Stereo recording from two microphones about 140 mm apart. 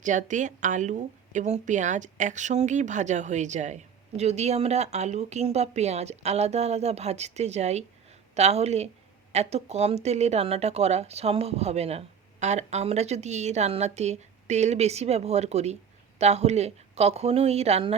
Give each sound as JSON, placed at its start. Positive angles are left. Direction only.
{"t": 0.0, "sound": "speech", "side_deg": -65}